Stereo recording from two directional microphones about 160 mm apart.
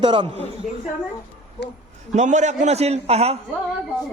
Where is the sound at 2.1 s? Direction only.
45° right (ahead or behind).